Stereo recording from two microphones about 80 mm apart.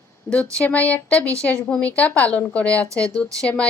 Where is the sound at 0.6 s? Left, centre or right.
Centre.